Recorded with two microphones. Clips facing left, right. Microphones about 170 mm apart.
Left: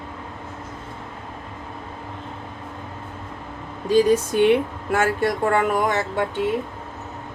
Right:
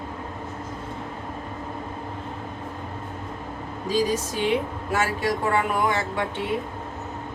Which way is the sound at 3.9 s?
60° left (ahead or behind).